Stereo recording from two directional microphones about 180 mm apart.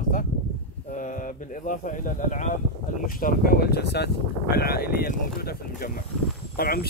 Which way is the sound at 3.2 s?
55° left (ahead or behind).